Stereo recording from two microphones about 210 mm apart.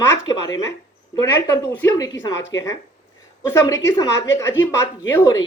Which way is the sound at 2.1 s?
60° left (ahead or behind).